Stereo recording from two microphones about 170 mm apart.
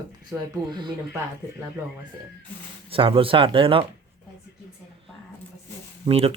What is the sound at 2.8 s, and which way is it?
Speech, 30° right (ahead or behind).